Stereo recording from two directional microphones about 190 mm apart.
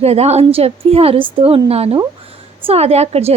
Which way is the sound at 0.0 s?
35° right (ahead or behind).